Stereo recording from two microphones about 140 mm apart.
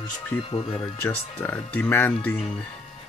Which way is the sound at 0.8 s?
10° left (ahead or behind).